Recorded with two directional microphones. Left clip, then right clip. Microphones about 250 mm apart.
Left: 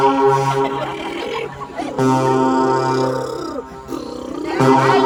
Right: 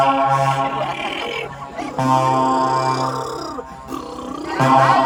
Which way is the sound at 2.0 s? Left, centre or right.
Centre.